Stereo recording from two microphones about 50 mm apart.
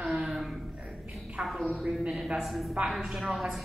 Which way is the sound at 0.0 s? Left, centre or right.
Centre.